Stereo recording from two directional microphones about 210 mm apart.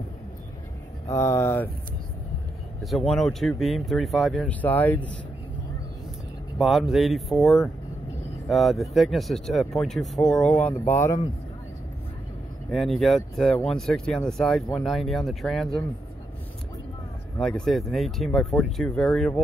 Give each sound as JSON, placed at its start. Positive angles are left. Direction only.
{"t": 1.0, "sound": "speech", "side_deg": 15}
{"t": 2.8, "sound": "speech", "side_deg": 0}
{"t": 6.6, "sound": "speech", "side_deg": 0}
{"t": 12.7, "sound": "speech", "side_deg": 0}
{"t": 17.4, "sound": "speech", "side_deg": 0}